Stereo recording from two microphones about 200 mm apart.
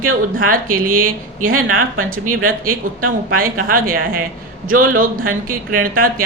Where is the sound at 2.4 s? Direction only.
45° right (ahead or behind).